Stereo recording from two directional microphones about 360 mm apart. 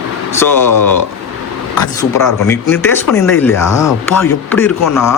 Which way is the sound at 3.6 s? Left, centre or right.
Left.